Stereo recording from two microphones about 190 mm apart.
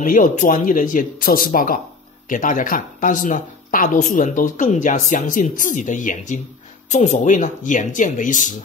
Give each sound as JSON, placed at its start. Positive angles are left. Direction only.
{"t": 0.0, "sound": "speech", "side_deg": 45}